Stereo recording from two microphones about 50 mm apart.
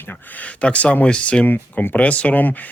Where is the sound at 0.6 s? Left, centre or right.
Left.